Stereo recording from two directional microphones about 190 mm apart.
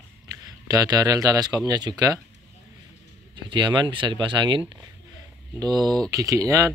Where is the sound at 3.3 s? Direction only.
25° right (ahead or behind).